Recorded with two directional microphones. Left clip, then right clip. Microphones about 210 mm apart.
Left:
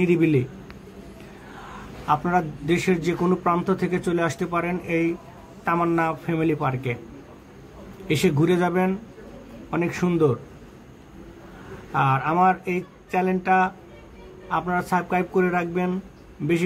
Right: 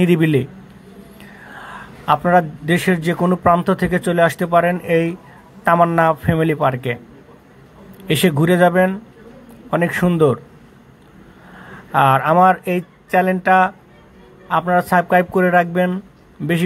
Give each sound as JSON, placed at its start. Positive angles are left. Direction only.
{"t": 0.0, "sound": "a man's voice", "side_deg": -30}
{"t": 1.6, "sound": "a man's voice", "side_deg": -25}
{"t": 8.1, "sound": "a man's voice", "side_deg": -30}
{"t": 11.9, "sound": "a man's voice", "side_deg": -30}